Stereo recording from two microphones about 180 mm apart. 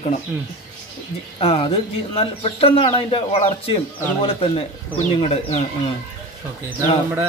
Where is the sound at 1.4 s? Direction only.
30° left (ahead or behind).